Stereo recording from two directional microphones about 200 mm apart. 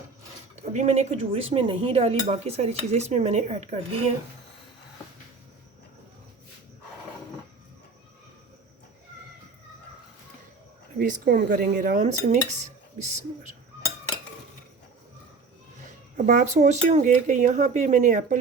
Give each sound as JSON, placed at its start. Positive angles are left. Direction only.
{"t": 0.7, "sound": "speech", "side_deg": -35}
{"t": 10.9, "sound": "speech", "side_deg": -45}
{"t": 16.1, "sound": "speech", "side_deg": -35}